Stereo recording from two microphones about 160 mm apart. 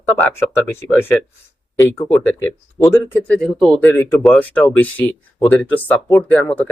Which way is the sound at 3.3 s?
Centre (ahead or behind).